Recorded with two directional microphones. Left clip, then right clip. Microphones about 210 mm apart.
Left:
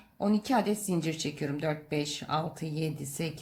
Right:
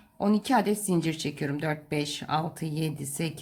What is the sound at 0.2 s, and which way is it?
Speech, 5° right (ahead or behind).